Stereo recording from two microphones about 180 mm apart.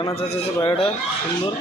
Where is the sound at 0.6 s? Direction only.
30° left (ahead or behind).